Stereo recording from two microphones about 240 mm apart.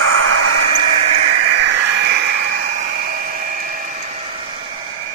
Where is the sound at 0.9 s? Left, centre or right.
Right.